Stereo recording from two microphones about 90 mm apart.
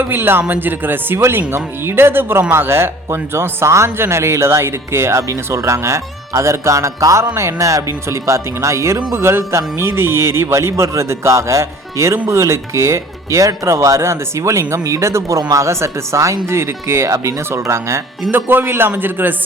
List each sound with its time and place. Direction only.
0.0 s speech: 25° right (ahead or behind)